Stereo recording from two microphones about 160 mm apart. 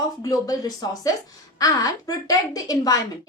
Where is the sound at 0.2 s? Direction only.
25° left (ahead or behind).